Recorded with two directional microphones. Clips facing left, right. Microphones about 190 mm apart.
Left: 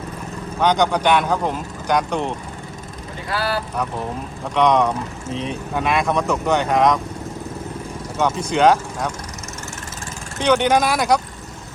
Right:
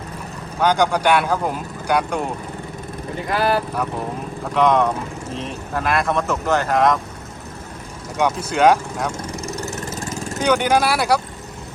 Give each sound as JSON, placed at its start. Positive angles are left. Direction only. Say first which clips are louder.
{"t": 0.6, "sound": "speech", "louder": "even", "side_deg": -10}
{"t": 3.2, "sound": "speech", "louder": "right 4 dB", "side_deg": -50}
{"t": 4.5, "sound": "speech", "louder": "even", "side_deg": 0}
{"t": 8.2, "sound": "speech", "louder": "even", "side_deg": -5}
{"t": 10.4, "sound": "speech", "louder": "left 1 dB", "side_deg": -5}